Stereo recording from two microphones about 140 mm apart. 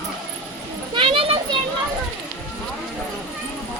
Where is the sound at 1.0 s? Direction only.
40° right (ahead or behind).